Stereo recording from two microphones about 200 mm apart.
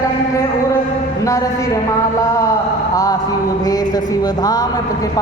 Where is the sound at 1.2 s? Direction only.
15° left (ahead or behind).